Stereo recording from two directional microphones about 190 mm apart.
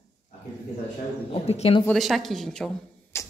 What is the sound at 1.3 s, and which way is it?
Speech, 30° left (ahead or behind).